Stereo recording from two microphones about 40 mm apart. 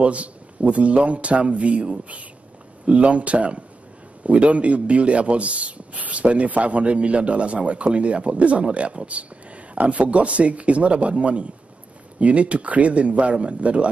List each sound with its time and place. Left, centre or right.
0.0 s a man's voice: right